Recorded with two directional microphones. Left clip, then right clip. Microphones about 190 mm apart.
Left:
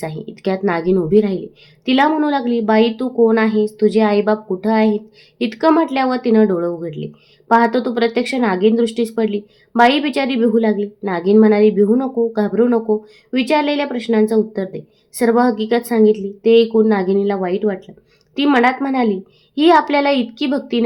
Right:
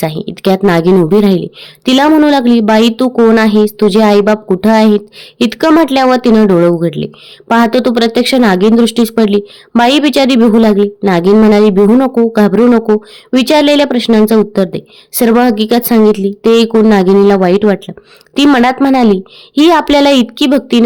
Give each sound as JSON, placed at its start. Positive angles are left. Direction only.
{"t": 0.0, "sound": "speech", "side_deg": -45}